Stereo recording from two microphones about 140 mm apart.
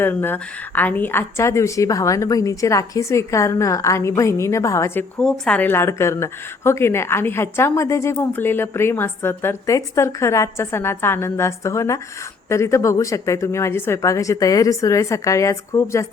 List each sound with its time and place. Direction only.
0.0 s a woman's voice: 15° left (ahead or behind)
5.2 s a woman's voice: 10° left (ahead or behind)